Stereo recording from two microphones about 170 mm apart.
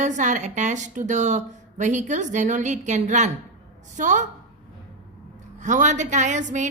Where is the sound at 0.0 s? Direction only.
45° right (ahead or behind).